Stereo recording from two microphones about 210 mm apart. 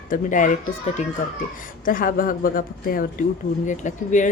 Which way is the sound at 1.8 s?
40° left (ahead or behind).